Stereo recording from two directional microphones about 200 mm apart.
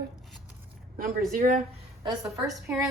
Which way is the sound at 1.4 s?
40° right (ahead or behind).